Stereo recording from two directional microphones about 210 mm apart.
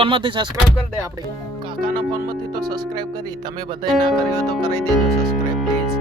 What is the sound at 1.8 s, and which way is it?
Speech, 20° right (ahead or behind).